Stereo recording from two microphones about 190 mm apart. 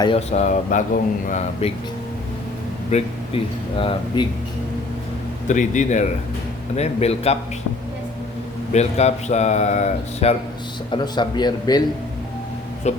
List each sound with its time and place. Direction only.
0.0 s speech: 30° left (ahead or behind)
2.9 s speech: 30° left (ahead or behind)
5.5 s speech: 40° left (ahead or behind)
8.7 s speech: 35° left (ahead or behind)
10.9 s speech: 25° left (ahead or behind)
12.9 s speech: 35° left (ahead or behind)